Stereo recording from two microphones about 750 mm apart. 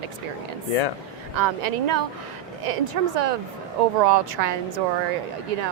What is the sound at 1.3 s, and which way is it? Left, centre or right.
Speech, right.